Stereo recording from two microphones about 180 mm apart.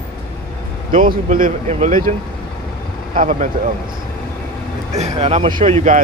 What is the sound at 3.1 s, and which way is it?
Speech, 45° right (ahead or behind).